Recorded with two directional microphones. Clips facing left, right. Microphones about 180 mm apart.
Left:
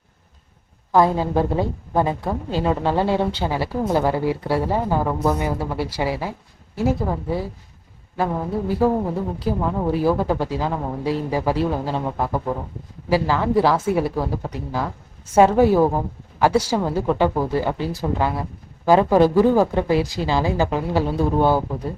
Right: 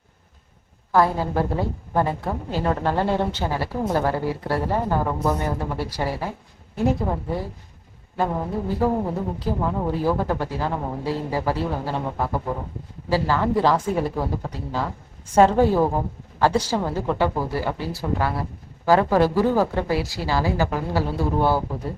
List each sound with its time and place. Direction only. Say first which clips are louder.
0.9 s a woman's voice: left 3 dB; 15° left (ahead or behind)
13.1 s a woman's voice: left 2 dB; 15° left (ahead or behind)